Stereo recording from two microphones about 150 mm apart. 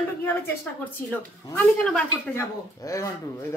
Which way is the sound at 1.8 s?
10° left (ahead or behind).